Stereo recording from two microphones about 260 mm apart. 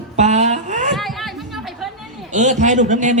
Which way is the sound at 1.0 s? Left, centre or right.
Centre.